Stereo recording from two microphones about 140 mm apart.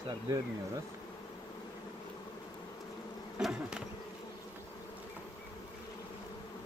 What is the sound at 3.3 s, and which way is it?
Bee, 5° right (ahead or behind).